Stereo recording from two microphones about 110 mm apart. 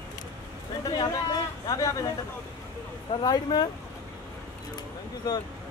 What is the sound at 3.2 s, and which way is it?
Speech, 45° left (ahead or behind).